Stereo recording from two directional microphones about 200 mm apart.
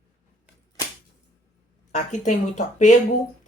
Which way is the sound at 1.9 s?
35° left (ahead or behind).